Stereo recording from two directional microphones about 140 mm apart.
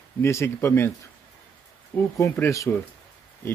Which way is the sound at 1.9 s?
20° left (ahead or behind).